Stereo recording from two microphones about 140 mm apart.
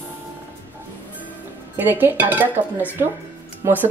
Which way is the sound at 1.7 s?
15° right (ahead or behind).